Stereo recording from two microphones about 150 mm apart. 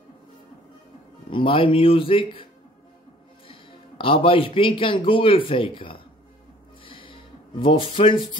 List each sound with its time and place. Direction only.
1.3 s speech: 35° left (ahead or behind)
4.0 s speech: 35° left (ahead or behind)
6.8 s a sound: 35° left (ahead or behind)